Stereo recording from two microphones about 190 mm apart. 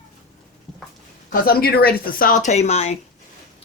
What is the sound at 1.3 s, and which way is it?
A man's voice, 55° left (ahead or behind).